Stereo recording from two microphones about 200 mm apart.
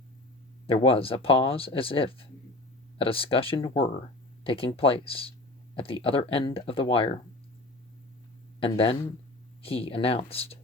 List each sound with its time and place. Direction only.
0.7 s speech: 25° left (ahead or behind)
8.6 s speech: 30° left (ahead or behind)